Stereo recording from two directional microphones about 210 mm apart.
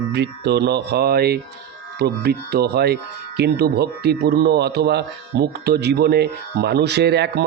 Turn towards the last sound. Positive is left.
turn(degrees=-55)  # may be behind; listen again after turning